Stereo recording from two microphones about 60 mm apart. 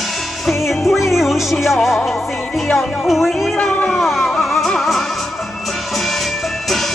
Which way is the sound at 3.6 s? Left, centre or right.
Centre.